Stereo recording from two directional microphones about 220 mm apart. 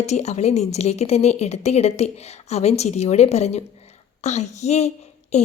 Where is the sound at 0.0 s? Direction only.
30° left (ahead or behind).